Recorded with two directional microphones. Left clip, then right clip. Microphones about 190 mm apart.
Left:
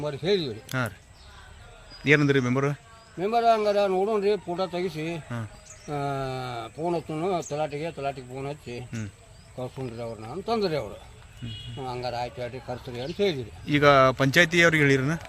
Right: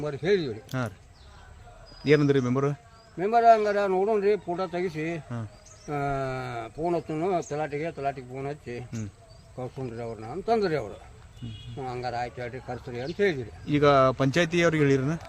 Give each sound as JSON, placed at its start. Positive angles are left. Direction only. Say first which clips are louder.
{"t": 0.0, "sound": "speech", "louder": "even", "side_deg": -15}
{"t": 0.7, "sound": "speech", "louder": "left 3 dB", "side_deg": 0}
{"t": 2.0, "sound": "speech", "louder": "left 1 dB", "side_deg": 0}
{"t": 3.2, "sound": "speech", "louder": "right 3 dB", "side_deg": -15}
{"t": 10.0, "sound": "speech", "louder": "even", "side_deg": -20}
{"t": 13.7, "sound": "speech", "louder": "left 2 dB", "side_deg": 0}